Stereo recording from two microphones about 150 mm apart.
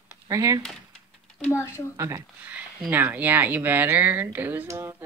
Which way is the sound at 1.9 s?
20° right (ahead or behind).